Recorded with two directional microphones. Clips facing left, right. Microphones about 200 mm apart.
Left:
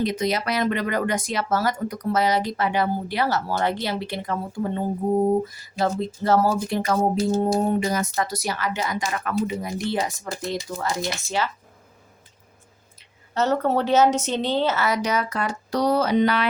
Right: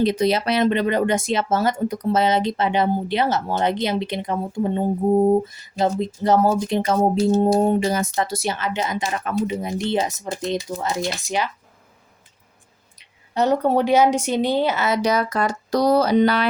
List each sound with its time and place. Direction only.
0.0 s speech: 30° right (ahead or behind)
13.0 s a woman's voice: 15° right (ahead or behind); by 16.5 s 35° right (ahead or behind)